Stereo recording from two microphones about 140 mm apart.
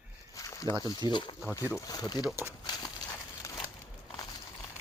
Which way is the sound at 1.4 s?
20° left (ahead or behind).